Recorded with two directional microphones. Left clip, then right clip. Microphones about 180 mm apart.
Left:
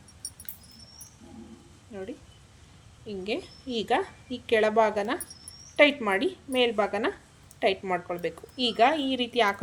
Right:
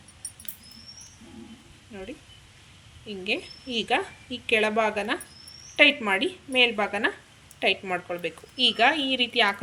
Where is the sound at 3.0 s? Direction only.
15° left (ahead or behind).